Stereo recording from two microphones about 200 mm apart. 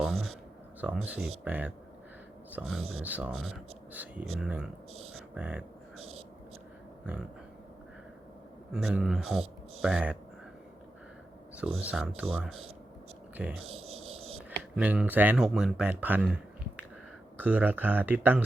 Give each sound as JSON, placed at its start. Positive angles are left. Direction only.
{"t": 0.0, "sound": "a sound", "side_deg": 0}
{"t": 0.8, "sound": "speech", "side_deg": -5}
{"t": 8.7, "sound": "speech", "side_deg": -5}
{"t": 11.8, "sound": "speech", "side_deg": -5}
{"t": 13.7, "sound": "insect", "side_deg": -30}
{"t": 14.8, "sound": "speech", "side_deg": -5}